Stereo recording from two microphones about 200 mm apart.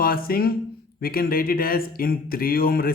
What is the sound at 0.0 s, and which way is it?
A man's voice, 45° left (ahead or behind).